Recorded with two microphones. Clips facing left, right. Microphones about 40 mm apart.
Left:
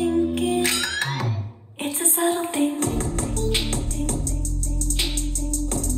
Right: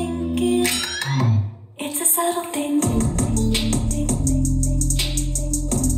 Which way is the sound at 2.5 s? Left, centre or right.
Left.